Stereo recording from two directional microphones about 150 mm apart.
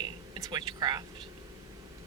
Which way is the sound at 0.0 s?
25° right (ahead or behind).